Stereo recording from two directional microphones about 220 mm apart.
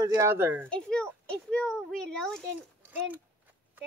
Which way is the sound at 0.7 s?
5° left (ahead or behind).